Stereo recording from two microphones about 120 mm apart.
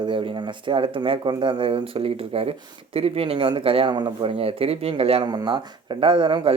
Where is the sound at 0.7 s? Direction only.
45° right (ahead or behind).